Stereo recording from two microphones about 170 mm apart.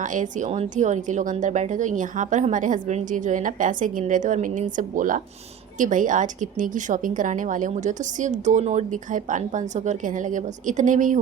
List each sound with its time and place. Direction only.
0.0 s a woman's voice: 50° right (ahead or behind)